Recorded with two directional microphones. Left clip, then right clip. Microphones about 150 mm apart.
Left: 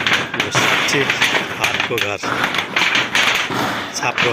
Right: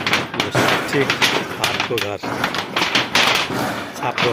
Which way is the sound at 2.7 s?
Centre (ahead or behind).